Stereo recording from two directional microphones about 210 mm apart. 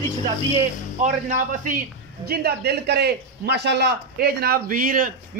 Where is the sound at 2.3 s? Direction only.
50° right (ahead or behind).